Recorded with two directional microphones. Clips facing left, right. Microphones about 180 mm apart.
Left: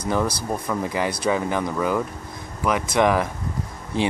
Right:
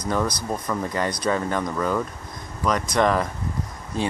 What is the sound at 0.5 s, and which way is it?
Speech, 10° left (ahead or behind).